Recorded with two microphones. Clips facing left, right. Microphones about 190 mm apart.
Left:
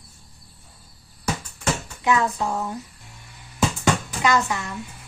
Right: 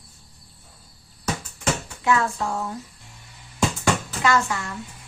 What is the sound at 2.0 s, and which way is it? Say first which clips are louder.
Speech: left 1 dB; 15° left (ahead or behind).